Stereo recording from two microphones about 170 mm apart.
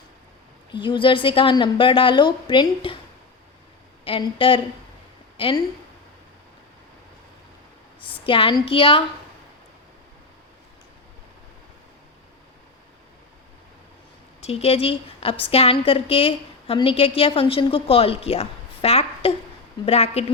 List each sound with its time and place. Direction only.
0.7 s a woman's voice: 30° left (ahead or behind)
4.0 s a woman's voice: 30° left (ahead or behind)
8.2 s a woman's voice: 30° left (ahead or behind)
14.4 s a woman's voice: 35° left (ahead or behind)